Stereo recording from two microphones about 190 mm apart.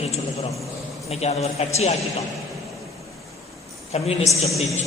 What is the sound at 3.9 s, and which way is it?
Speech, 35° left (ahead or behind).